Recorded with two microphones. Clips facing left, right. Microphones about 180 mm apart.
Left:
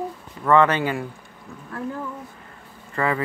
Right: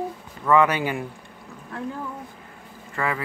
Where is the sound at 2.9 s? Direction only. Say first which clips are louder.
Left 3 dB; centre (ahead or behind).